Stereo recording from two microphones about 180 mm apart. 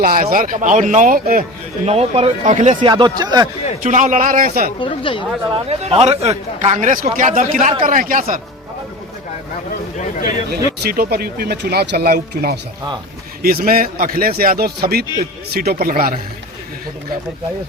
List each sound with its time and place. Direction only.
0.0 s a man's voice: 55° right (ahead or behind)
1.9 s speech: 35° right (ahead or behind)
2.8 s speech: 25° right (ahead or behind)
3.8 s a man's voice: 45° right (ahead or behind)
4.8 s speech: 30° left (ahead or behind)
5.6 s a man's voice: 35° right (ahead or behind)
10.0 s speech: 50° left (ahead or behind)
10.5 s a man's voice: 55° right (ahead or behind)